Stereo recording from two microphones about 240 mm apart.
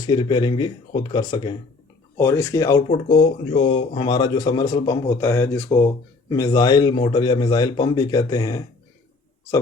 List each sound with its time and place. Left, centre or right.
0.1 s speech: centre